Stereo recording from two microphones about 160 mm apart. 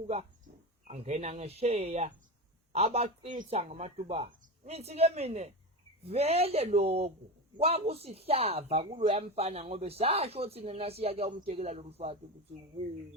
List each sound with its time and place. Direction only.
0.9 s speech: 45° right (ahead or behind)